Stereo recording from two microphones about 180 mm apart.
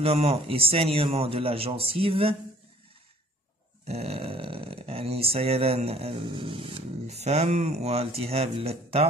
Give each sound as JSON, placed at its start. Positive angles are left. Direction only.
{"t": 0.0, "sound": "speech", "side_deg": -35}
{"t": 3.8, "sound": "speech", "side_deg": -35}